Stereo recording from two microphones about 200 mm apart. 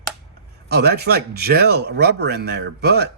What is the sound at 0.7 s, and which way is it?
A man's voice, 55° right (ahead or behind).